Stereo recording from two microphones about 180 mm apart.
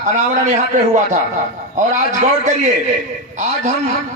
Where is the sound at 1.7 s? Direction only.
40° right (ahead or behind).